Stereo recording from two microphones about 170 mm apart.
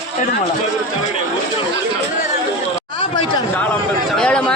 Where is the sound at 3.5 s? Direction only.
5° left (ahead or behind).